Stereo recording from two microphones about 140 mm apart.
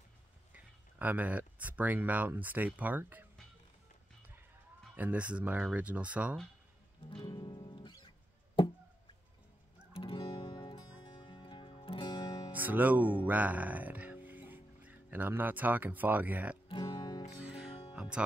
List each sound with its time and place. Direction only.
0.9 s speech: 10° right (ahead or behind)
4.9 s speech: 10° right (ahead or behind)
7.1 s music: 35° left (ahead or behind)
9.9 s music: 40° left (ahead or behind)
12.5 s speech: 10° right (ahead or behind)
16.6 s music: 35° left (ahead or behind)
17.9 s music: 10° right (ahead or behind)